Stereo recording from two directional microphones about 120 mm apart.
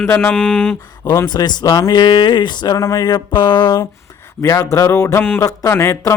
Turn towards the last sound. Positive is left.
turn(degrees=20)  # may be behind; listen again after turning